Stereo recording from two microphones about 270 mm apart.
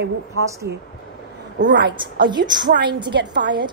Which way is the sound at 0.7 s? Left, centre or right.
Right.